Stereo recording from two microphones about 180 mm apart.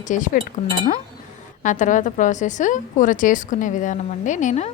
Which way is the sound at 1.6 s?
45° left (ahead or behind).